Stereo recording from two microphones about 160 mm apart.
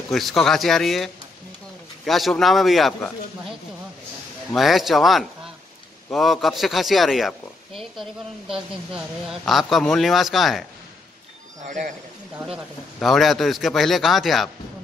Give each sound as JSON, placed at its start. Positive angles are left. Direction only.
{"t": 0.1, "sound": "speech", "side_deg": 0}
{"t": 4.6, "sound": "speech", "side_deg": 0}
{"t": 11.6, "sound": "speech", "side_deg": -55}
{"t": 12.4, "sound": "speech", "side_deg": 0}